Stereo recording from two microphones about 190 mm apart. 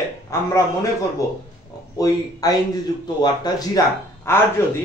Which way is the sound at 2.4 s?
20° left (ahead or behind).